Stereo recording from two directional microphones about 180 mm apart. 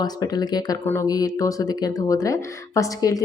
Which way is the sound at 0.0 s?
20° left (ahead or behind).